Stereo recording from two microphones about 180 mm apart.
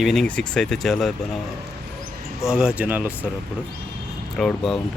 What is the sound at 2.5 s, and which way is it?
Speech, 5° right (ahead or behind).